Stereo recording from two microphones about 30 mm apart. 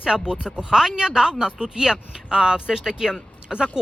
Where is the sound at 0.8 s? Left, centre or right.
Centre.